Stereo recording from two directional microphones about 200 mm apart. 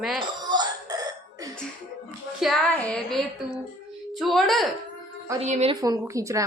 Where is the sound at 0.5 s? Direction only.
20° right (ahead or behind).